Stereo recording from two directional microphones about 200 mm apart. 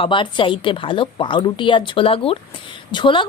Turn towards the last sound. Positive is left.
turn(degrees=25)  # may be behind; listen again after turning